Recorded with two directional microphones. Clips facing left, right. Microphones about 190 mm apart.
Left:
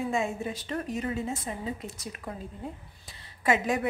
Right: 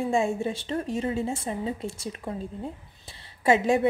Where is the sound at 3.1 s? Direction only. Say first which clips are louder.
Right 4 dB; 30° right (ahead or behind).